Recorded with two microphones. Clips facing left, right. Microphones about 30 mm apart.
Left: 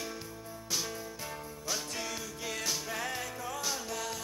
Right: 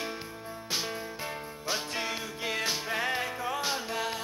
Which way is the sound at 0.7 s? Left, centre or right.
Right.